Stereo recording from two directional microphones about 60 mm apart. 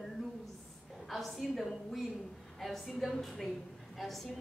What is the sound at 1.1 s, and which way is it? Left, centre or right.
A woman's voice, centre.